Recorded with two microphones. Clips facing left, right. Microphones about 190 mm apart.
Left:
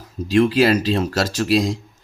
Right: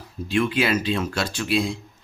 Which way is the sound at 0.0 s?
40° left (ahead or behind).